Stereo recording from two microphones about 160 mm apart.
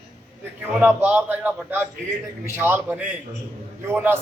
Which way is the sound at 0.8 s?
10° right (ahead or behind).